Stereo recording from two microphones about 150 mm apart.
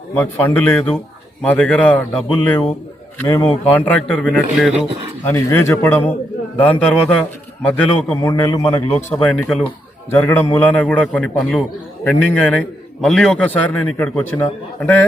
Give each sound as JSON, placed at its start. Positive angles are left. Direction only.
{"t": 0.1, "sound": "a man's voice", "side_deg": 15}
{"t": 5.2, "sound": "a man's voice", "side_deg": 15}
{"t": 8.2, "sound": "a man's voice", "side_deg": 25}